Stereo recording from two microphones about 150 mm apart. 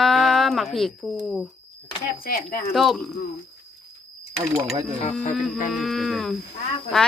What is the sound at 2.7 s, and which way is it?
Speech, centre (ahead or behind).